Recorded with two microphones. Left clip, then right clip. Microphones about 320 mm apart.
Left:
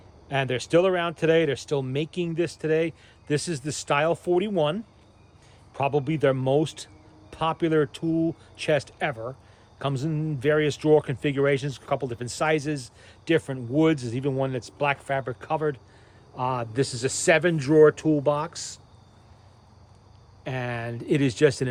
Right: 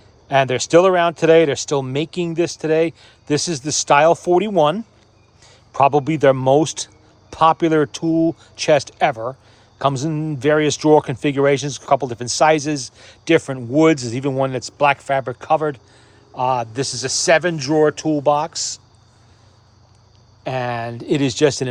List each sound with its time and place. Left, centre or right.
0.3 s speech: centre
20.4 s speech: centre